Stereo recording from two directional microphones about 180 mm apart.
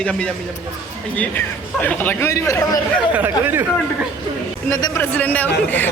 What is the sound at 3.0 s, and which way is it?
Speech, 10° right (ahead or behind).